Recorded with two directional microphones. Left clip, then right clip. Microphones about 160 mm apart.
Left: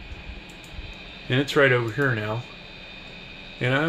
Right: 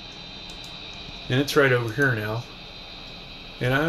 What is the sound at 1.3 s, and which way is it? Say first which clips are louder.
Speech: left 1 dB; 20° left (ahead or behind).